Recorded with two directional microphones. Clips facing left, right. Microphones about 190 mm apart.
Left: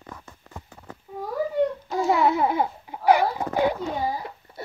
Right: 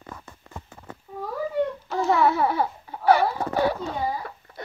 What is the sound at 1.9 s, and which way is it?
Babbling, 15° left (ahead or behind).